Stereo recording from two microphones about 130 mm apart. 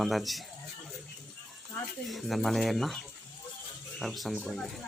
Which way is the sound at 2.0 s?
Centre (ahead or behind).